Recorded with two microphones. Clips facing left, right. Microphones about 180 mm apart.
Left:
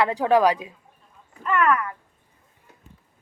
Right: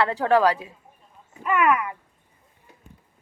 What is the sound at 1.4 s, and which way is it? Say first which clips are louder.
Speech: even; 10° right (ahead or behind).